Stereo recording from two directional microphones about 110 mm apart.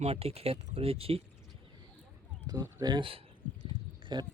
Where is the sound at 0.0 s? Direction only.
65° right (ahead or behind).